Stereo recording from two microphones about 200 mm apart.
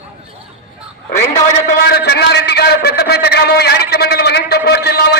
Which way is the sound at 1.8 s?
55° left (ahead or behind).